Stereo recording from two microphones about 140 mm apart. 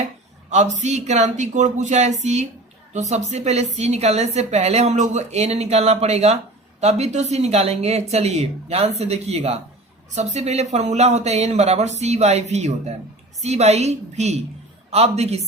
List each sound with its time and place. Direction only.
0.5 s a woman's voice: 55° right (ahead or behind)